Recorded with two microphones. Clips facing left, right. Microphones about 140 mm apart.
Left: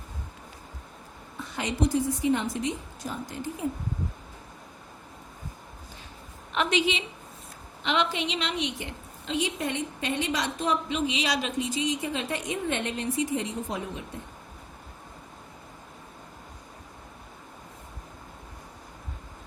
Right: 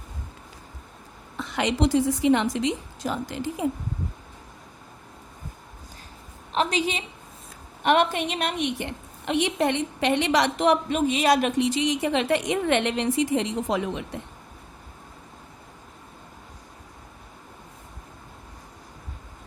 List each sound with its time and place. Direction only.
1.4 s a woman's voice: 85° right
6.5 s a woman's voice: 35° right (ahead or behind)
7.8 s a woman's voice: 55° right (ahead or behind); by 10.9 s 70° right (ahead or behind)
10.9 s a woman's voice: 50° right (ahead or behind); by 14.2 s 80° right